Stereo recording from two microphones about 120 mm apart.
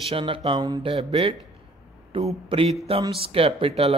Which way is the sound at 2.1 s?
45° right (ahead or behind).